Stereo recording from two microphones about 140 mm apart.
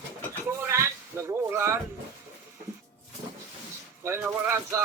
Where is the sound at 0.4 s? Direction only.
15° right (ahead or behind).